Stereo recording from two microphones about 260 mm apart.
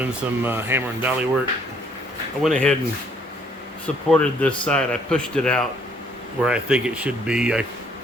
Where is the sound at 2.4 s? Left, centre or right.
Centre.